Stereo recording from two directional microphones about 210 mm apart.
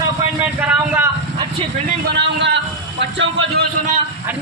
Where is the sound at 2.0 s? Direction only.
55° right (ahead or behind).